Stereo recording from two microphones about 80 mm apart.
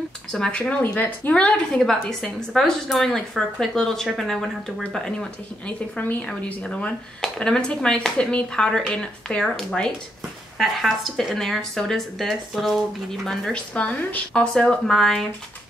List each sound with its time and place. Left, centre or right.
0.3 s a woman's voice: centre
5.9 s a woman's voice: centre
13.5 s a woman's voice: centre